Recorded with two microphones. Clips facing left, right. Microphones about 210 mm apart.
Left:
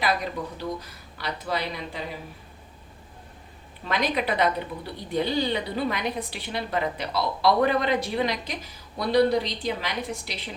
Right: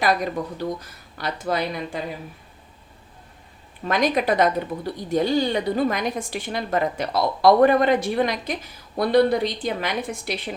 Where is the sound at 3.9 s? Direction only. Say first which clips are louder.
Right 5 dB; 45° right (ahead or behind).